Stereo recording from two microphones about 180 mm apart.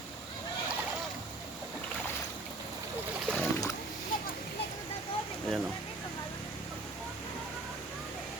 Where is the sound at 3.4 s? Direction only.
15° left (ahead or behind).